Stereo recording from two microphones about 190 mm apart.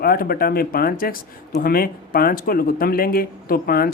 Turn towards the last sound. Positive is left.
turn(degrees=50)  # may be behind; listen again after turning